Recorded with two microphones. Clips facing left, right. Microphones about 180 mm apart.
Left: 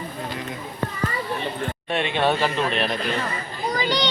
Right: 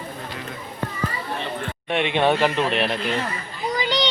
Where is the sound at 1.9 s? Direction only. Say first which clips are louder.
Right 2 dB; 15° right (ahead or behind).